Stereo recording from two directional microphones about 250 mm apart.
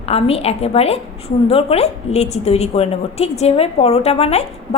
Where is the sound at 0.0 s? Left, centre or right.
Left.